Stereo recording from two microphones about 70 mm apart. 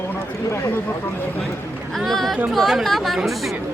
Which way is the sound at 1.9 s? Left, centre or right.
Centre.